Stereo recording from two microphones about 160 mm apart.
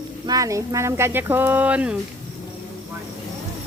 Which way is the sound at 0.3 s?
20° right (ahead or behind).